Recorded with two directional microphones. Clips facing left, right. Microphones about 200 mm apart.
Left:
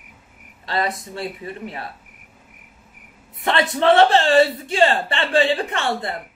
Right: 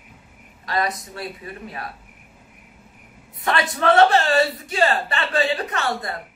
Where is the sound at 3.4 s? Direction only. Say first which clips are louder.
Left 3 dB; 25° left (ahead or behind).